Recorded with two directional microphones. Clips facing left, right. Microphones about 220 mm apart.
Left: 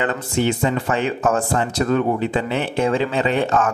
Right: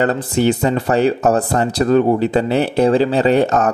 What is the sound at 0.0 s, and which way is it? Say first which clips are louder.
Speech: right 5 dB; 35° right (ahead or behind).